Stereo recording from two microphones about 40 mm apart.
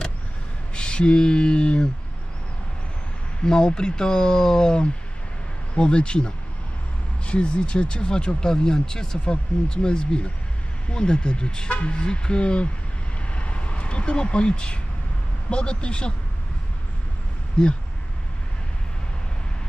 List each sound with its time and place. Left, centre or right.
0.7 s a sound: left
3.4 s speech: left
13.3 s vehicle: left
15.5 s speech: left